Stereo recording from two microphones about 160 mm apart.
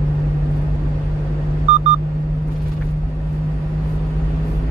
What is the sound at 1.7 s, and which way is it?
Vehicle, 40° right (ahead or behind).